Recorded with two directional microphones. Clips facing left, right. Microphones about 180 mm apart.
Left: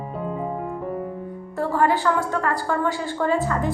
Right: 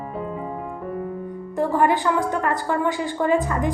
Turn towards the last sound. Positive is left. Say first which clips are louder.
# right 1 dB
turn(degrees=-15)  # may be behind; listen again after turning